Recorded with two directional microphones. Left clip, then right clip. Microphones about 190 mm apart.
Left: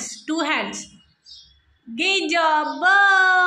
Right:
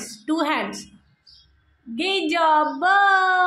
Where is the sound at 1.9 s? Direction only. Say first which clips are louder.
Left 2 dB; 10° right (ahead or behind).